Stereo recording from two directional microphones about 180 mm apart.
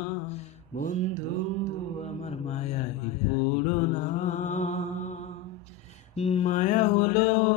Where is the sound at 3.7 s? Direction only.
40° left (ahead or behind).